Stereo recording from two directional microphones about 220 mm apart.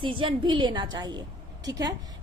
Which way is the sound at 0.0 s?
25° right (ahead or behind).